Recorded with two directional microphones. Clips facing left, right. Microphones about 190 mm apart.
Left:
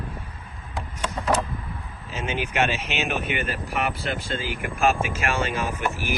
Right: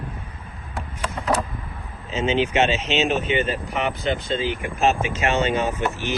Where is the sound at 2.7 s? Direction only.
10° left (ahead or behind).